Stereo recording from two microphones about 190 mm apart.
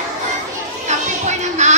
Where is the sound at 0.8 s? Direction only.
40° right (ahead or behind).